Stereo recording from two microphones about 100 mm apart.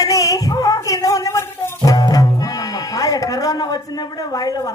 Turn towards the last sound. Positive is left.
turn(degrees=35)  # may be behind; listen again after turning